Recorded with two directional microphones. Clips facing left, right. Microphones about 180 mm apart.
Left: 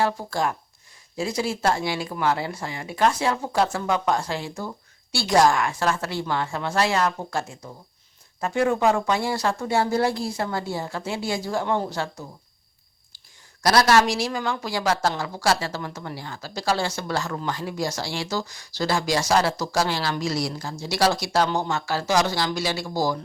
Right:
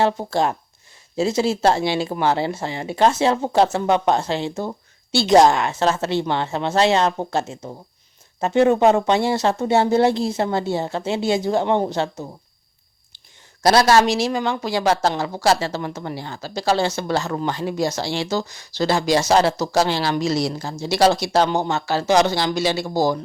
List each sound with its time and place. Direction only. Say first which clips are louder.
0.0 s a woman's voice: right 5 dB; 25° right (ahead or behind)